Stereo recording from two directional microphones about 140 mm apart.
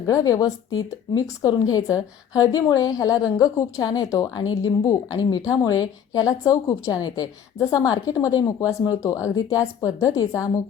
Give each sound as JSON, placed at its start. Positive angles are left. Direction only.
{"t": 0.0, "sound": "a woman's voice", "side_deg": 25}